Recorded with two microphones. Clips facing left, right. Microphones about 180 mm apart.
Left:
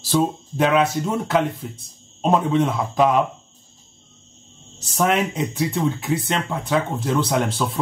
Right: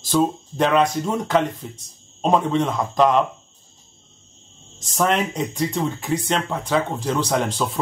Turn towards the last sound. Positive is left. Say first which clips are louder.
# even
turn(degrees=0)  # may be behind; listen again after turning